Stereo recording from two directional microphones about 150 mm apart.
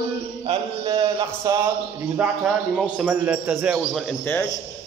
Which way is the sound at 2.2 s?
10° right (ahead or behind).